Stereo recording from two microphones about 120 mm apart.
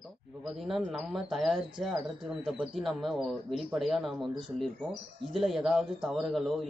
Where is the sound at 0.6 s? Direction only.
Centre (ahead or behind).